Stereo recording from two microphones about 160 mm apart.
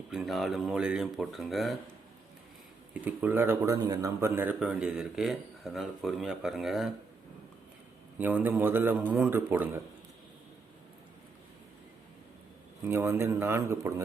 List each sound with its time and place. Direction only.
0.1 s speech: centre (ahead or behind)
2.9 s speech: 10° right (ahead or behind)
8.2 s speech: 10° right (ahead or behind)
12.8 s speech: 15° right (ahead or behind)